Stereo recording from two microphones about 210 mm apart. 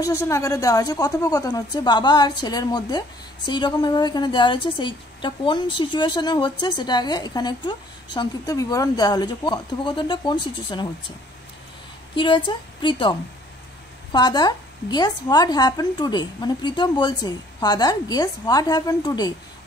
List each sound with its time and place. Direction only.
0.0 s a woman's voice: 15° left (ahead or behind)
12.2 s a woman's voice: 25° left (ahead or behind)
14.1 s a woman's voice: 20° left (ahead or behind)